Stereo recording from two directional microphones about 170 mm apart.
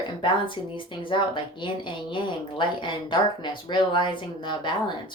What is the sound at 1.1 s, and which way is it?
A woman's voice, 30° left (ahead or behind).